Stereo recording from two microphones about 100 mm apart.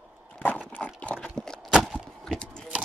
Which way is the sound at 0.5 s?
10° right (ahead or behind).